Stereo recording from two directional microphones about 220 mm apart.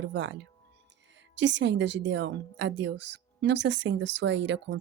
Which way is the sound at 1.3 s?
55° right (ahead or behind).